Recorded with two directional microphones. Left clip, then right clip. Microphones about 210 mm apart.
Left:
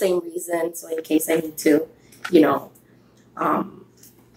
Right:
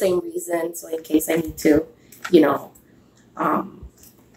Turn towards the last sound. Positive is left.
turn(degrees=0)  # may be behind; listen again after turning